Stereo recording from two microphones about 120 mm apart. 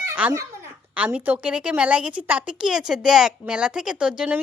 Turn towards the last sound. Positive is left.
turn(degrees=-10)  # may be behind; listen again after turning